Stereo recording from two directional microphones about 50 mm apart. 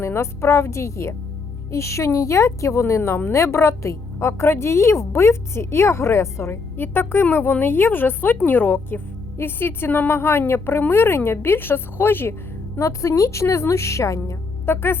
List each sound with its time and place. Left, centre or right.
0.0 s a woman's voice: left
12.8 s a woman's voice: left
14.7 s a woman's voice: left